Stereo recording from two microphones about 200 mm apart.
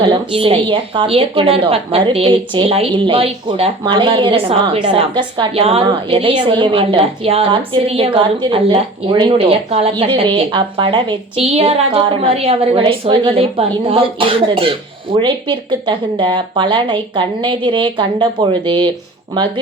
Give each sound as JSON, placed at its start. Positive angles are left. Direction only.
{"t": 0.0, "sound": "a woman's voice", "side_deg": -25}